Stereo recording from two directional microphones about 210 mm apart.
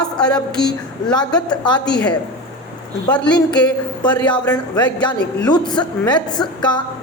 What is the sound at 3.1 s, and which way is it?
Speech, 5° left (ahead or behind).